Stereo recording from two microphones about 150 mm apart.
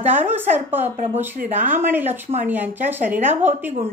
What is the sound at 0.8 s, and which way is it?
Speech, 55° right (ahead or behind).